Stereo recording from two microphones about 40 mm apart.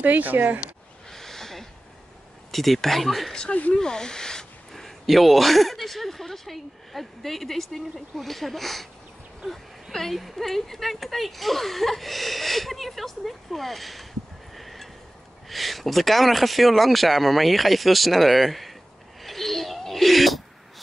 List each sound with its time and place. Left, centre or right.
0.0 s speech: right
1.1 s a sound: centre
2.5 s speech: centre
3.7 s speech: centre
14.5 s a sound: centre
15.4 s speech: centre
19.2 s gasp: centre